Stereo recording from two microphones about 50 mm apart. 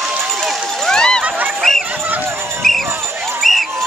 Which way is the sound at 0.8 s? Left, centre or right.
Centre.